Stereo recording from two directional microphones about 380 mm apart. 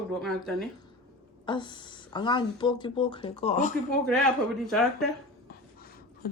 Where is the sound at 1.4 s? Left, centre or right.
Centre.